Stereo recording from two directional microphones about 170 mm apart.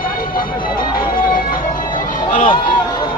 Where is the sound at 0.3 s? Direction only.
55° left (ahead or behind).